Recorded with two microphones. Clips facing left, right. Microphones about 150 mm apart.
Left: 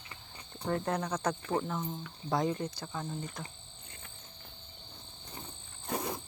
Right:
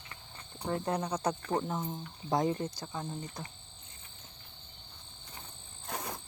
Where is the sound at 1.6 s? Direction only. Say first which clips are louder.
Right 1 dB; 25° right (ahead or behind).